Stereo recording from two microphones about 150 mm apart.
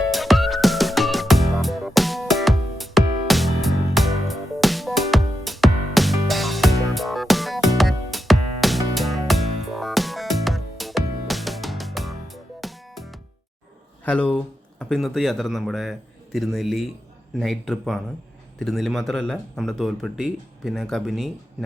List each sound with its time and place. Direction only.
0.1 s music: centre (ahead or behind)
14.0 s speech: 10° left (ahead or behind)